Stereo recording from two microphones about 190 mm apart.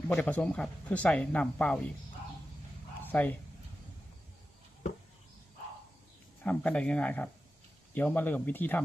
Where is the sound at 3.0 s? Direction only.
10° left (ahead or behind).